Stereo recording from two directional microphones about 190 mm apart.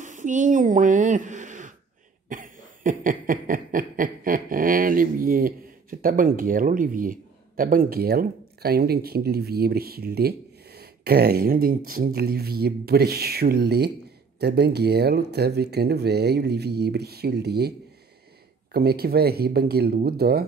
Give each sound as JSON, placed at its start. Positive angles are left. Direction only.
{"t": 0.0, "sound": "a sound", "side_deg": -40}
{"t": 2.2, "sound": "cough", "side_deg": -45}
{"t": 14.4, "sound": "speech", "side_deg": -60}